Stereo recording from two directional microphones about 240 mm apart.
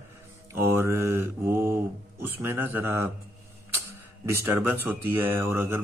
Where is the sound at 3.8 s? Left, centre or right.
Centre.